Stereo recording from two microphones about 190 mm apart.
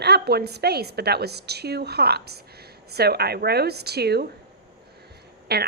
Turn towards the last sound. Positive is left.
turn(degrees=-60)  # may be behind; listen again after turning